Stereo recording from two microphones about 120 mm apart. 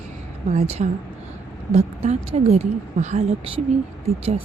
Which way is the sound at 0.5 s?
65° right (ahead or behind).